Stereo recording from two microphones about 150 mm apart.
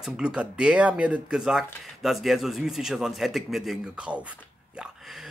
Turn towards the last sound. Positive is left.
turn(degrees=-5)  # may be behind; listen again after turning